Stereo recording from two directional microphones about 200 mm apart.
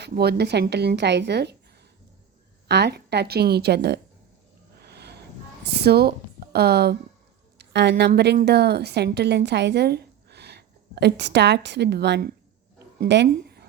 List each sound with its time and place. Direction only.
0.0 s speech: 55° right (ahead or behind)
2.6 s speech: 55° right (ahead or behind)
4.8 s music: 55° right (ahead or behind)
5.6 s a woman's voice: 55° right (ahead or behind)